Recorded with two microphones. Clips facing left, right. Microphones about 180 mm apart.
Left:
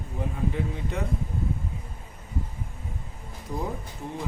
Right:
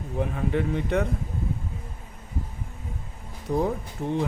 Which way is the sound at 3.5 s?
65° right (ahead or behind).